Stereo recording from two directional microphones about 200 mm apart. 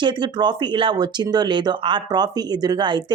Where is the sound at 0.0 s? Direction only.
25° right (ahead or behind).